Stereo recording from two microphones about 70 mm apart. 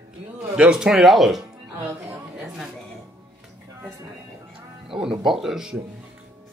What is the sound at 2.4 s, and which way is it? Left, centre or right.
Speech, centre.